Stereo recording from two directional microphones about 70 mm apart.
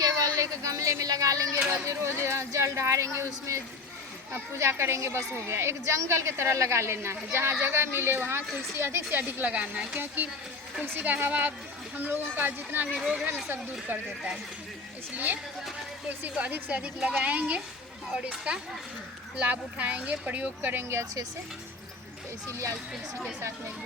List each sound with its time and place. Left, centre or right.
0.0 s a sound: right
1.9 s speech: right
4.3 s a woman's voice: right
9.5 s speech: centre
15.1 s speech: right
22.4 s speech: right